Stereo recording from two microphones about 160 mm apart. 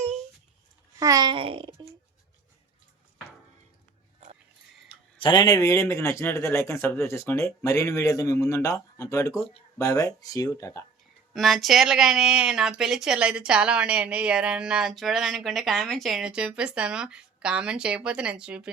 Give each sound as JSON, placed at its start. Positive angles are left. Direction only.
{"t": 0.9, "sound": "a sound", "side_deg": -20}
{"t": 4.9, "sound": "speech", "side_deg": 30}
{"t": 11.3, "sound": "speech", "side_deg": 0}